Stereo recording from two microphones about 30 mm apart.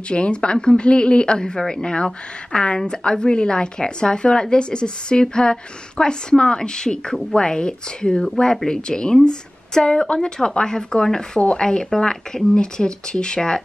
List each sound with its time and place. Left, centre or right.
0.1 s a woman's voice: left